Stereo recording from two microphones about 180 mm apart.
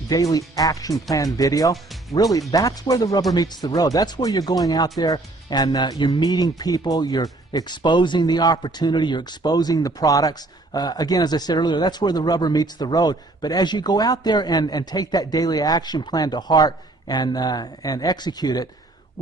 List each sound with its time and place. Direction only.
0.1 s speech: 20° left (ahead or behind)
1.7 s music: centre (ahead or behind)
2.1 s speech: 20° left (ahead or behind)